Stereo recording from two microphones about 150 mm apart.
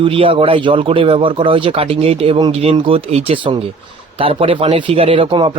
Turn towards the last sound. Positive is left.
turn(degrees=-35)  # may be behind; listen again after turning